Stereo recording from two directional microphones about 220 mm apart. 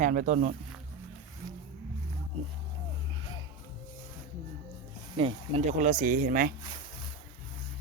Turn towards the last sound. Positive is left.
turn(degrees=-40)  # may be behind; listen again after turning